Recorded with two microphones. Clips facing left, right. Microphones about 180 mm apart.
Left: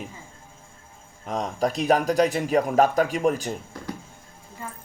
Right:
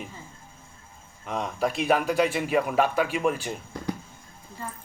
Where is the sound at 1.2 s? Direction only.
40° left (ahead or behind).